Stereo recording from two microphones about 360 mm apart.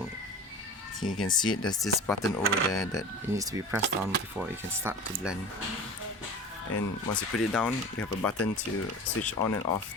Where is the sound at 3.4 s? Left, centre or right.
Centre.